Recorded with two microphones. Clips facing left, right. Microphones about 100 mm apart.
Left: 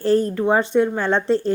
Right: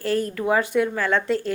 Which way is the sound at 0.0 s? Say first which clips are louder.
Left 6 dB; 30° left (ahead or behind).